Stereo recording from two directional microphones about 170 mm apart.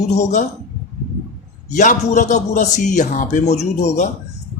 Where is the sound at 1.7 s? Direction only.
45° left (ahead or behind).